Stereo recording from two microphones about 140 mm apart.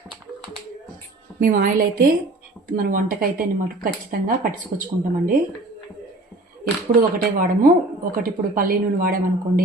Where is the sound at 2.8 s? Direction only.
85° right.